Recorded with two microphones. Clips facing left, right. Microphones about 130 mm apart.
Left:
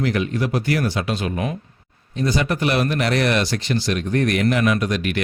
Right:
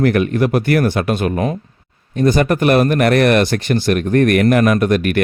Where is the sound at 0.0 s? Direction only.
55° right (ahead or behind).